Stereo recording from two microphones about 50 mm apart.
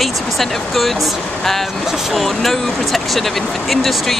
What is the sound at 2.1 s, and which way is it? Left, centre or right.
Speech, centre.